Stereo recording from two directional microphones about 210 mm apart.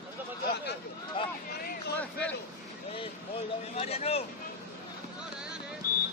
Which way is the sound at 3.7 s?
30° left (ahead or behind).